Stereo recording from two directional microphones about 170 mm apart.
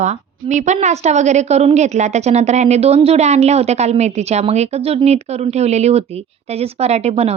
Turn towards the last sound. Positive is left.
turn(degrees=-40)  # may be behind; listen again after turning